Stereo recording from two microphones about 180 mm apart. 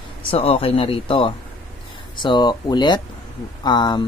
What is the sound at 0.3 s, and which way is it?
Speech, 30° left (ahead or behind).